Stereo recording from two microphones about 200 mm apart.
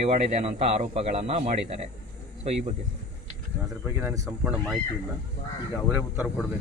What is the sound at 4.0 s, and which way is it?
Speech, 10° right (ahead or behind).